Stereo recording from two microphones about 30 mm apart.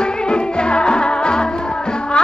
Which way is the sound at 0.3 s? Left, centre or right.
Left.